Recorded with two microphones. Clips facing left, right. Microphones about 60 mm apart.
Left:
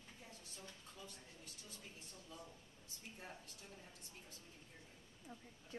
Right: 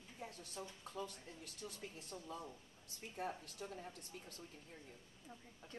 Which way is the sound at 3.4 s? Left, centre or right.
Right.